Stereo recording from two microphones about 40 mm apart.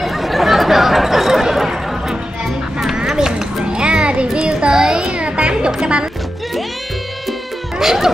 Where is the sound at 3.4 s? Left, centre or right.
Centre.